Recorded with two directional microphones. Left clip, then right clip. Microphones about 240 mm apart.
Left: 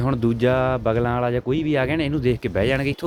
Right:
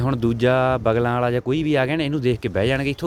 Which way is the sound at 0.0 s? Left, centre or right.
Centre.